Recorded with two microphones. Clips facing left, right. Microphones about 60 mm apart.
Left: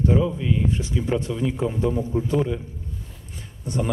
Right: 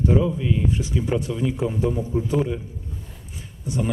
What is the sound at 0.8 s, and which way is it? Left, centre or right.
Speech, centre.